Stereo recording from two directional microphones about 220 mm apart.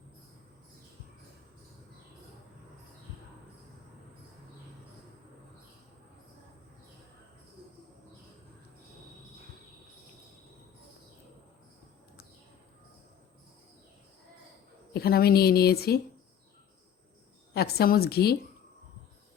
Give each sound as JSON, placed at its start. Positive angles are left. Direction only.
{"t": 14.9, "sound": "a woman's voice", "side_deg": 45}
{"t": 17.5, "sound": "a woman's voice", "side_deg": 45}